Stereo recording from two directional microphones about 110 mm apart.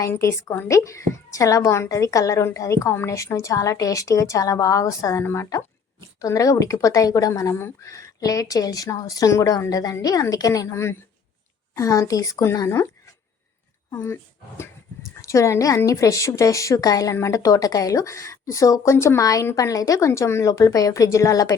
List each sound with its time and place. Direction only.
0.0 s a woman's voice: 25° left (ahead or behind)
13.9 s a woman's voice: 25° left (ahead or behind)
15.2 s a woman's voice: 25° left (ahead or behind)